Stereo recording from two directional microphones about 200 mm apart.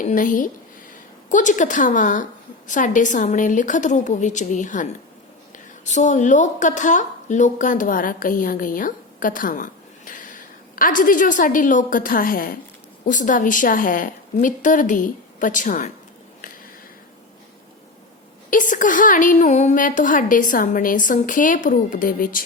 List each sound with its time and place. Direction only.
0.0 s a woman's voice: 40° left (ahead or behind)
18.5 s a woman's voice: 40° left (ahead or behind)